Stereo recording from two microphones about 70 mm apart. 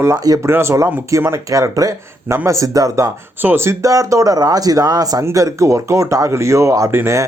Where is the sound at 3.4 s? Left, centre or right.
Right.